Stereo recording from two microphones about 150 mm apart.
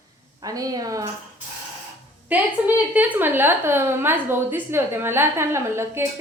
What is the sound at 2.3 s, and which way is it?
A woman's voice, 10° right (ahead or behind).